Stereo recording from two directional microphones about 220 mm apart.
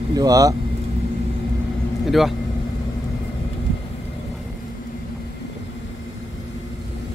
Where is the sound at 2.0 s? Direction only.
Centre (ahead or behind).